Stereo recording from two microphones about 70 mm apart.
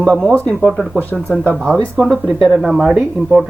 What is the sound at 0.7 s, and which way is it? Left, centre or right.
Speech, centre.